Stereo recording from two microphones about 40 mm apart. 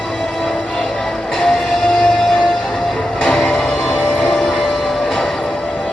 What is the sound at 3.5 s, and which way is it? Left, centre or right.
Music, centre.